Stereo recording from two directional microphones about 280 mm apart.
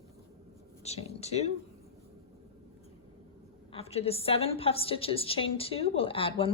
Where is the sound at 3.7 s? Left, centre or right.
Left.